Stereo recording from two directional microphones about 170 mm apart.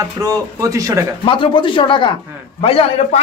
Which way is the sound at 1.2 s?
30° left (ahead or behind).